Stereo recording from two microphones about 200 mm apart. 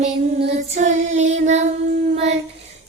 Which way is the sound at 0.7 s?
35° right (ahead or behind).